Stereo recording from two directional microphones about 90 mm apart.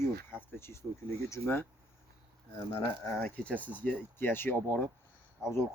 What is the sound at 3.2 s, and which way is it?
Speech, 15° left (ahead or behind).